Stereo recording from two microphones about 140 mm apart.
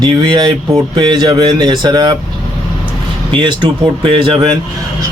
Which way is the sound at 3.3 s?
35° right (ahead or behind).